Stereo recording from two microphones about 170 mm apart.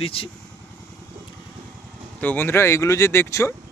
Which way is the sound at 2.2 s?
10° left (ahead or behind).